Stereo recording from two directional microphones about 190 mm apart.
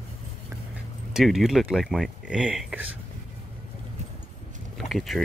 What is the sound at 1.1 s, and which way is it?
Speech, centre (ahead or behind).